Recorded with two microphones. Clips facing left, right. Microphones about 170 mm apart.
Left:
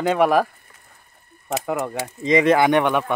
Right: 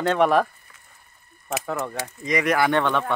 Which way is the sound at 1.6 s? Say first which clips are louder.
Left 5 dB; 15° left (ahead or behind).